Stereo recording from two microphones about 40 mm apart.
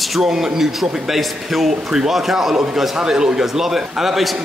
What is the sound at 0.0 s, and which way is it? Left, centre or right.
A man's voice, centre.